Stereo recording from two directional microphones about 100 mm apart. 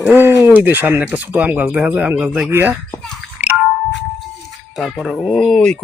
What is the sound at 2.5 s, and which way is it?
Speech, 20° right (ahead or behind).